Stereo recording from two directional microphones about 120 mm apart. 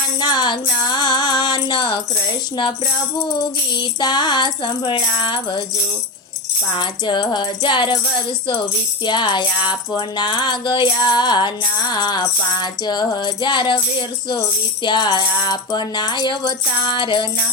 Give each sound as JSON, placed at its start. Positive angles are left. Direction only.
{"t": 0.2, "sound": "music", "side_deg": 35}
{"t": 3.8, "sound": "music", "side_deg": 35}
{"t": 6.7, "sound": "music", "side_deg": 40}
{"t": 9.0, "sound": "music", "side_deg": 40}
{"t": 14.8, "sound": "music", "side_deg": 40}